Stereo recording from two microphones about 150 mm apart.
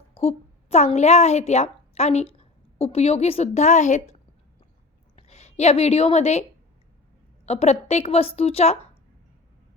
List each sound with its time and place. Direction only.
0.1 s a woman's voice: 40° left (ahead or behind)
7.4 s a woman's voice: 45° left (ahead or behind)